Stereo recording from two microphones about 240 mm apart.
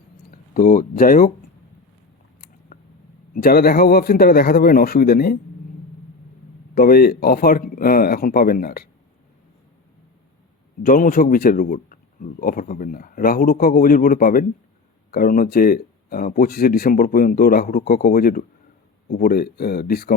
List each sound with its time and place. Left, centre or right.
0.5 s a man's voice: left
2.7 s a sound: left
3.3 s a man's voice: left
6.7 s a man's voice: left
10.8 s a man's voice: left